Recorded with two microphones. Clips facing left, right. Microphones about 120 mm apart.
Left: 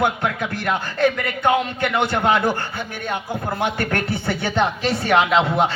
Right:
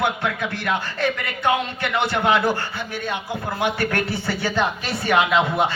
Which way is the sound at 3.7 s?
55° left (ahead or behind).